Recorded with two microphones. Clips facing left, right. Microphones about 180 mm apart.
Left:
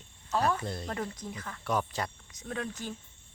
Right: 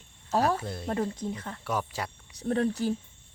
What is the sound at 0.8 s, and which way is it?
Speech, 30° right (ahead or behind).